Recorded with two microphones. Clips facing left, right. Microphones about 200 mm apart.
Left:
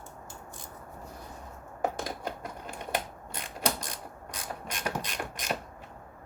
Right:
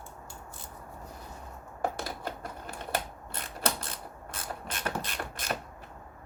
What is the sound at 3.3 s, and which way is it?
Mechanisms, 15° left (ahead or behind).